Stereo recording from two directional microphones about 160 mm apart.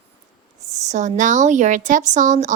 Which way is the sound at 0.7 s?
45° right (ahead or behind).